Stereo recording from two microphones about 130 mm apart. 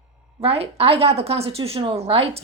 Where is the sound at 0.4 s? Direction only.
50° right (ahead or behind).